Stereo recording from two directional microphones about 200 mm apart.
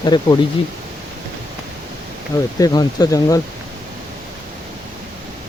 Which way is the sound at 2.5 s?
20° left (ahead or behind).